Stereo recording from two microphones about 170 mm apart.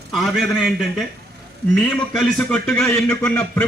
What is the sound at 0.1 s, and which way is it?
Speech, centre (ahead or behind).